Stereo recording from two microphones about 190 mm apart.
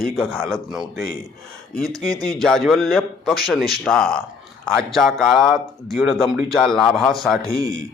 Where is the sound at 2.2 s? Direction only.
Centre (ahead or behind).